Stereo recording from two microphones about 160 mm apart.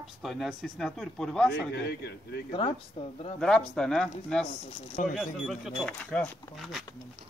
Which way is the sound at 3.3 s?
5° left (ahead or behind).